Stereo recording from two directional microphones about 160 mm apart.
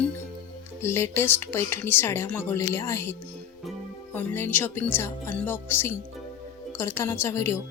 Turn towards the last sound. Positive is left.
turn(degrees=15)  # may be behind; listen again after turning